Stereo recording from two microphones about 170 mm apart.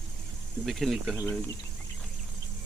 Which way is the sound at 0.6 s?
Centre (ahead or behind).